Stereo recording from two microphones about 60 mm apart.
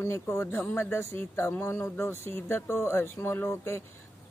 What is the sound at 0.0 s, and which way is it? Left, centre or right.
Speech, left.